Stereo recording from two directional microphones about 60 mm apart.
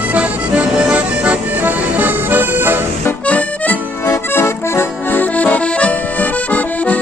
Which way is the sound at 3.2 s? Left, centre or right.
Left.